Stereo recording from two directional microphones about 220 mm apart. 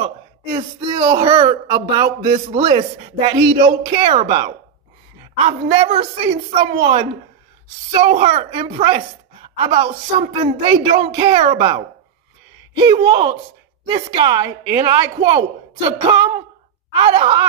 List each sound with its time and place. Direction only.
0.0 s speech: 20° right (ahead or behind)